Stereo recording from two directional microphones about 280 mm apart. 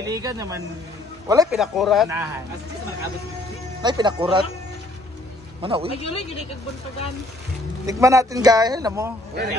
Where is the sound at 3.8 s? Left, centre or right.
Centre.